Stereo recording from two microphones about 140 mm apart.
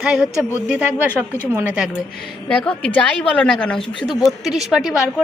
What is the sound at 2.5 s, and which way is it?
A woman's voice, 5° left (ahead or behind).